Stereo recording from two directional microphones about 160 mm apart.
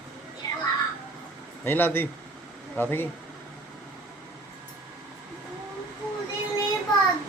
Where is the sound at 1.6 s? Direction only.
15° left (ahead or behind).